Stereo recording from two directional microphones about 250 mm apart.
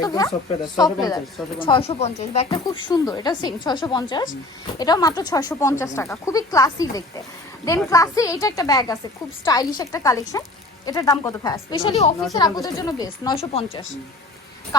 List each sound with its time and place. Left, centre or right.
0.0 s speech: centre